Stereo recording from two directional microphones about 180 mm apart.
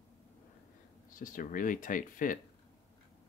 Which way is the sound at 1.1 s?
50° left (ahead or behind).